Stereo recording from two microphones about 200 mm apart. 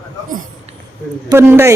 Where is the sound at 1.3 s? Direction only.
10° right (ahead or behind).